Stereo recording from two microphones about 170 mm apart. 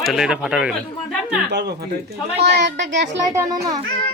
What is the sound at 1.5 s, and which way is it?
Speech, 75° right (ahead or behind).